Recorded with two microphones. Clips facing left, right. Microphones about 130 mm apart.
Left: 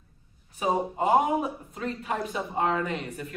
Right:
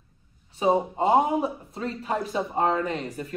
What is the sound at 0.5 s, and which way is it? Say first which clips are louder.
Speech: right 4 dB; 25° right (ahead or behind).